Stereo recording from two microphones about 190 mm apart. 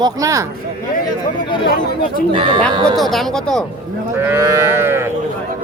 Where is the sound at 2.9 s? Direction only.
Centre (ahead or behind).